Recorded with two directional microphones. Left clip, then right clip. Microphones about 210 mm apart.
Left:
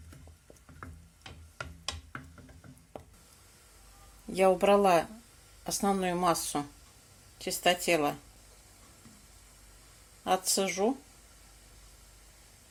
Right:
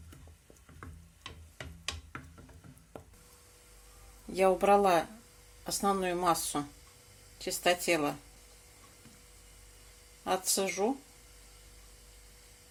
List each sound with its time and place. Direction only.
4.3 s speech: 15° left (ahead or behind)
10.2 s speech: 15° left (ahead or behind)